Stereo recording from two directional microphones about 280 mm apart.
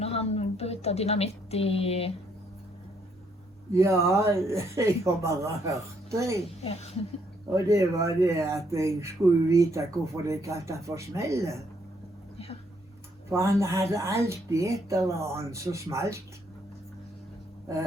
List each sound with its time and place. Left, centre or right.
0.0 s a woman's voice: left
3.7 s speech: centre
6.6 s a woman's voice: left
7.5 s speech: centre
13.3 s speech: centre